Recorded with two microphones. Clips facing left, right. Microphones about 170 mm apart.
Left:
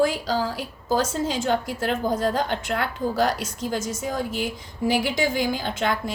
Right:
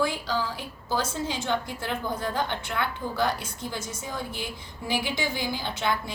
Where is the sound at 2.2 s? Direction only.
90° left.